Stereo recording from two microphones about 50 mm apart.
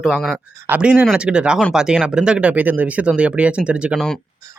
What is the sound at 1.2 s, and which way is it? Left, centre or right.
Speech, centre.